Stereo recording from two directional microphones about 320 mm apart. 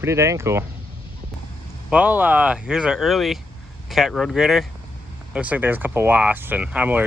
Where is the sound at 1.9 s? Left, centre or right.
Centre.